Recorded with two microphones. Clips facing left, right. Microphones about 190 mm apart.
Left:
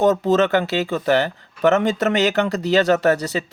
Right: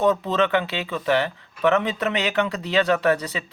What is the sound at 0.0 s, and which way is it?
Speech, 45° left (ahead or behind).